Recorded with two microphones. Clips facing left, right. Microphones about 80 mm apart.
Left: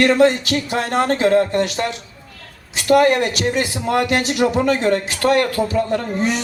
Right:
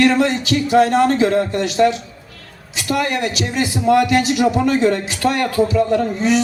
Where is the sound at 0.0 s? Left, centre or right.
Left.